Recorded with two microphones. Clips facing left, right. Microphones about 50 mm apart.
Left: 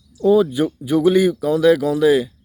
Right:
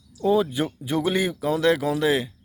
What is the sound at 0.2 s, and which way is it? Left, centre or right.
Speech, centre.